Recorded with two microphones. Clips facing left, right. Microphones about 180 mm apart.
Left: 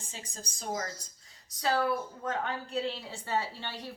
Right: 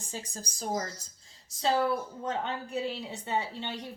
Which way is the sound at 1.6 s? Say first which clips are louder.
Right 2 dB; 25° right (ahead or behind).